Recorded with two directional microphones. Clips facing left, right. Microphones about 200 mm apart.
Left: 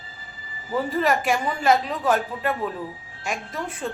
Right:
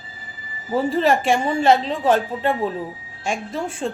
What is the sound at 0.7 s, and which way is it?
A woman's voice, 30° right (ahead or behind).